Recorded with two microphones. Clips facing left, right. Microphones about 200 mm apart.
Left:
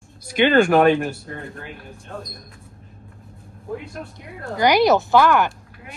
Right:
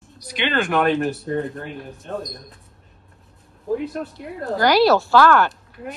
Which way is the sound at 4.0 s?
Centre (ahead or behind).